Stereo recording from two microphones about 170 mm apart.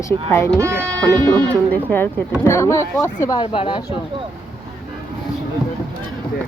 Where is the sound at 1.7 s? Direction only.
10° left (ahead or behind); by 3.8 s 30° left (ahead or behind).